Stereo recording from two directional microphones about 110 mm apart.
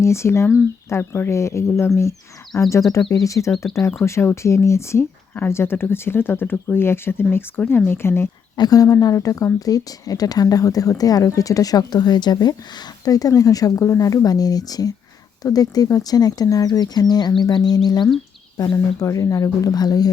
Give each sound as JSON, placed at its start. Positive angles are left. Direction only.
{"t": 0.0, "sound": "speech", "side_deg": 25}
{"t": 8.5, "sound": "speech", "side_deg": 35}